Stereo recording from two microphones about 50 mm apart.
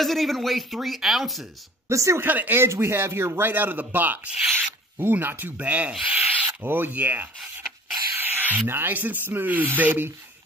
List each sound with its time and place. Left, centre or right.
0.0 s speech: centre
1.9 s speech: right
2.2 s a man's voice: right
5.6 s rub: right
8.1 s snake: right
8.6 s a man's voice: right